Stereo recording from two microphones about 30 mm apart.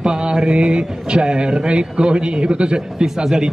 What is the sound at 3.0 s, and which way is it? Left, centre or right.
Speech, centre.